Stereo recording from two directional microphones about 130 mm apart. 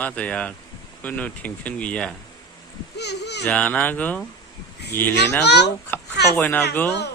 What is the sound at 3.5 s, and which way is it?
Speech, 10° left (ahead or behind).